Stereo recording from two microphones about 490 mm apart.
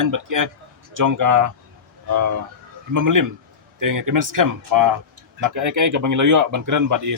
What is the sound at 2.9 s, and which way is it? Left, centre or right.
Speech, right.